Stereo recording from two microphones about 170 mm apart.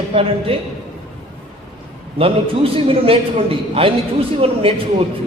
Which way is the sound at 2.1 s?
35° right (ahead or behind).